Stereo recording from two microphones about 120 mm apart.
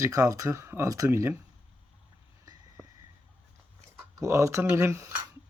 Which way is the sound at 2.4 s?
30° right (ahead or behind).